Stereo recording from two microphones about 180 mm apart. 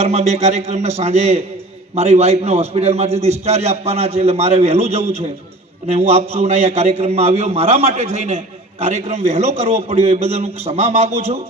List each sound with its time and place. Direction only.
0.0 s a man's voice: 35° right (ahead or behind)